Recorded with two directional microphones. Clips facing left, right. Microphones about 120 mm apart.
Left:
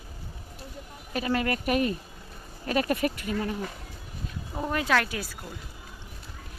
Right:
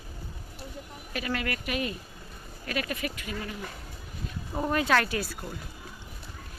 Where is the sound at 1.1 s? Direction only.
30° left (ahead or behind).